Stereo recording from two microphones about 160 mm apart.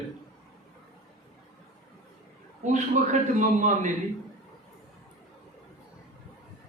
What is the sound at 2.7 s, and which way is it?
A man's voice, 50° right (ahead or behind).